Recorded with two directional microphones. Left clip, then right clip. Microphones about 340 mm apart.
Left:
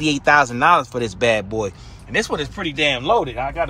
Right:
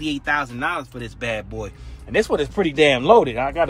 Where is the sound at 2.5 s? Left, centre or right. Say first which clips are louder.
Right 4 dB; centre.